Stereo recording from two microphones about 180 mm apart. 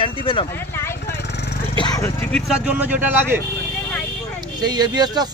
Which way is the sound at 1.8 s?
15° left (ahead or behind).